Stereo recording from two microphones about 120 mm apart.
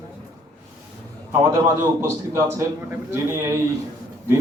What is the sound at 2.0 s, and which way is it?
A man's voice, 25° right (ahead or behind).